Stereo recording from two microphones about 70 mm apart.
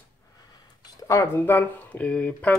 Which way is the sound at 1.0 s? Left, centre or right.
Left.